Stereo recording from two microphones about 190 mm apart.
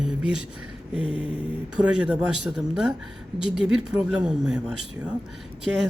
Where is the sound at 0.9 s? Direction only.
25° left (ahead or behind).